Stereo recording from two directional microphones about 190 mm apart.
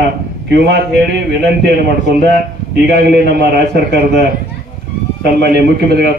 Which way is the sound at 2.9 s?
60° right (ahead or behind).